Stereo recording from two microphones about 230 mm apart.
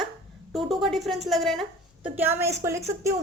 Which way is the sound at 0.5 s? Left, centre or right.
Centre.